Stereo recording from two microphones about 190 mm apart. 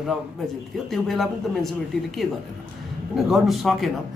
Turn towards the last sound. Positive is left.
turn(degrees=0)  # may be behind; listen again after turning